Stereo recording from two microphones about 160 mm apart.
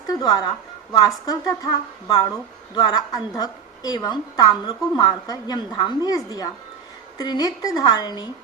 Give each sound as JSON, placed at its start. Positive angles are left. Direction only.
{"t": 0.1, "sound": "a woman's voice", "side_deg": 25}
{"t": 2.7, "sound": "a woman's voice", "side_deg": 25}